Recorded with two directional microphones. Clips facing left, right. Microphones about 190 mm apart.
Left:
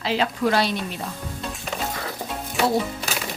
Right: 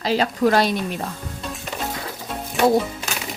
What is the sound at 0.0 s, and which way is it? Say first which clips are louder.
Speech: right 3 dB; 40° right (ahead or behind).